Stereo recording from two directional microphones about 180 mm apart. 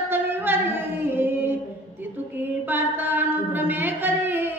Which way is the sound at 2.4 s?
10° right (ahead or behind).